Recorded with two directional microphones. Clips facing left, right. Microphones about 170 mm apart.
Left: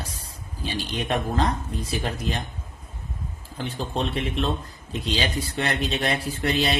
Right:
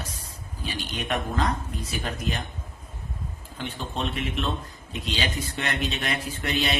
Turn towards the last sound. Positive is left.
turn(degrees=35)  # may be behind; listen again after turning